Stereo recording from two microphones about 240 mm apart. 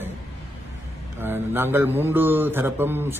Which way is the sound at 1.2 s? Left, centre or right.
Centre.